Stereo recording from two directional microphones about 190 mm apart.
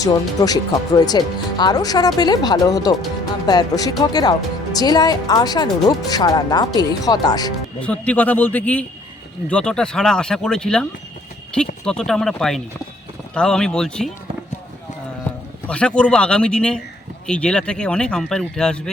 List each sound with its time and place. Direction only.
0.0 s speech: 20° left (ahead or behind)
7.8 s a man's voice: 5° left (ahead or behind)
15.6 s speech: 5° left (ahead or behind)